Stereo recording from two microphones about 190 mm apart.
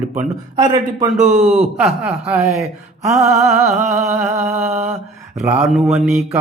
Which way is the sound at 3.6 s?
35° right (ahead or behind).